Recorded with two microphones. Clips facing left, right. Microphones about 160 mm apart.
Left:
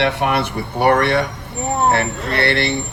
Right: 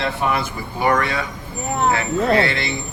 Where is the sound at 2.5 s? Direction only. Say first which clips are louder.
Left 6 dB; 70° left (ahead or behind).